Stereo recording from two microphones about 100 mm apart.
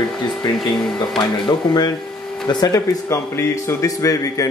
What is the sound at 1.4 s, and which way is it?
Speech, 45° left (ahead or behind).